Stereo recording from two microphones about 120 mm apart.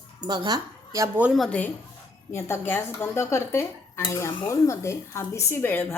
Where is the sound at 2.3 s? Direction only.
20° left (ahead or behind).